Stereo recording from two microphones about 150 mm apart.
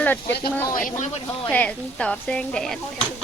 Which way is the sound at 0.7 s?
65° left (ahead or behind).